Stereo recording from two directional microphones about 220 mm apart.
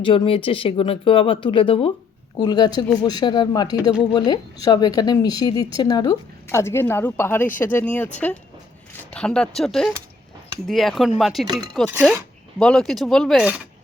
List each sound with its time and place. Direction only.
0.0 s speech: 25° left (ahead or behind); by 8.1 s 5° left (ahead or behind)
9.1 s speech: 5° left (ahead or behind)
12.5 s speech: centre (ahead or behind)